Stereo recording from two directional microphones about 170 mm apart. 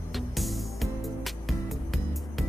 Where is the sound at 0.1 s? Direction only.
Centre (ahead or behind).